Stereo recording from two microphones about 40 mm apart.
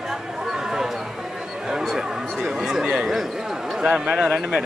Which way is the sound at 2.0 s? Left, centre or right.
Centre.